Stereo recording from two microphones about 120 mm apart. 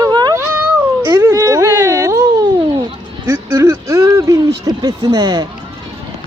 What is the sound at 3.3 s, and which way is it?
Speech, 20° right (ahead or behind).